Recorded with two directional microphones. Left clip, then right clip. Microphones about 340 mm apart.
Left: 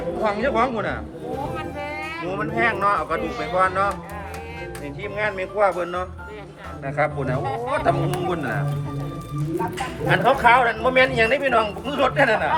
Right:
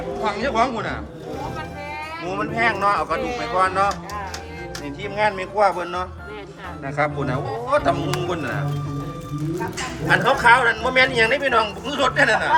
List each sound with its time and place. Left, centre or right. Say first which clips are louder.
0.2 s a man's voice: even; centre
2.2 s a man's voice: right 1 dB; centre
5.0 s a man's voice: right 3 dB; centre
10.1 s a man's voice: right 1 dB; centre